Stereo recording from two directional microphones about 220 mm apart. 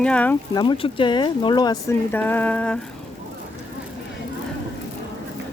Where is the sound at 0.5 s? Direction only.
20° left (ahead or behind).